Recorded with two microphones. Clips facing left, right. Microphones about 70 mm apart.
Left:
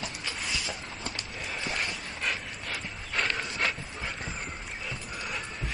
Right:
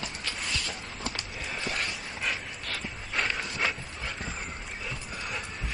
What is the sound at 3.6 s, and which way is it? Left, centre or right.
Dog, centre.